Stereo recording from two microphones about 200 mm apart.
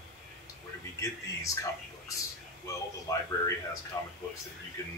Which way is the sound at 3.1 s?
15° left (ahead or behind).